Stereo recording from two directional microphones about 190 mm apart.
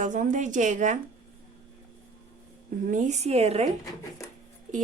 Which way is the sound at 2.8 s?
40° right (ahead or behind).